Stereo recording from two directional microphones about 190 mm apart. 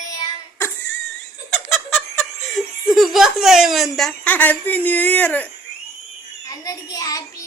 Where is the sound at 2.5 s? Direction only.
Centre (ahead or behind).